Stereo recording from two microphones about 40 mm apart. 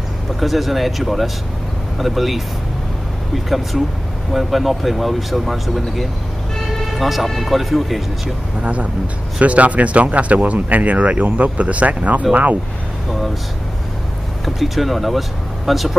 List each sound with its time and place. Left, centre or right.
0.4 s speech: centre
3.4 s speech: centre
6.9 s speech: centre
9.4 s speech: right
14.4 s speech: centre